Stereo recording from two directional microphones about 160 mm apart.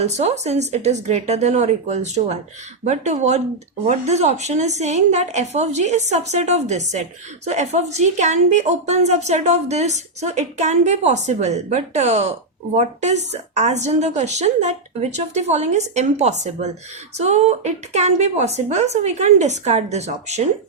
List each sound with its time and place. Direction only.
0.0 s a woman's voice: 45° right (ahead or behind)